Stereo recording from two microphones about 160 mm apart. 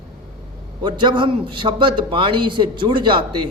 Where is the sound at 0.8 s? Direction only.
30° right (ahead or behind).